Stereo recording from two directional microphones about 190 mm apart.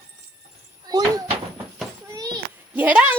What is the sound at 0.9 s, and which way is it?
Door, 20° right (ahead or behind).